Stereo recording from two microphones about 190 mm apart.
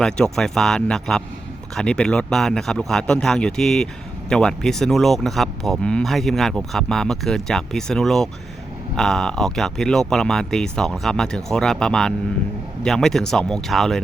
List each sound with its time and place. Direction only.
0.0 s speech: 5° left (ahead or behind)